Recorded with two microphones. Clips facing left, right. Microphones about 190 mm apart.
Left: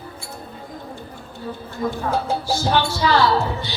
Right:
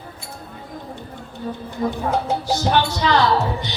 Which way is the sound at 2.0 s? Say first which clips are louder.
Even; 20° right (ahead or behind).